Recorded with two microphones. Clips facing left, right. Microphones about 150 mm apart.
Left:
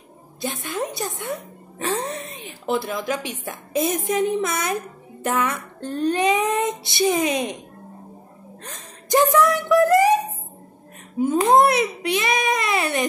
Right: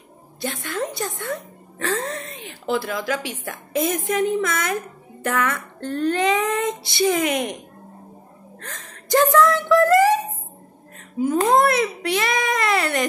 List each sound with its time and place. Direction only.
0.4 s a woman's voice: 20° left (ahead or behind)
5.2 s child singing: 20° left (ahead or behind)
6.8 s a woman's voice: 20° left (ahead or behind)
8.6 s a woman's voice: 20° left (ahead or behind)
11.4 s a woman's voice: 20° left (ahead or behind)